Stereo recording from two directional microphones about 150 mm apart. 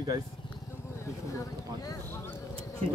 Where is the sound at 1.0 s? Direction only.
20° left (ahead or behind).